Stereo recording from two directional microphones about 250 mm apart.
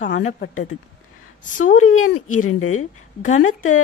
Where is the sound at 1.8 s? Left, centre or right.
Left.